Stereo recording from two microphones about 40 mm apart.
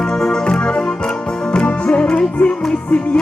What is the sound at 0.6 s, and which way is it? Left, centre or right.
Music, left.